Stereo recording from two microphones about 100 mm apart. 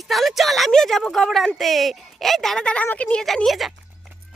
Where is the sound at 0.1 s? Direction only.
Centre (ahead or behind).